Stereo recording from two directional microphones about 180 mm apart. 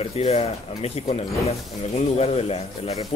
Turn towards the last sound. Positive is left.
turn(degrees=35)  # may be behind; listen again after turning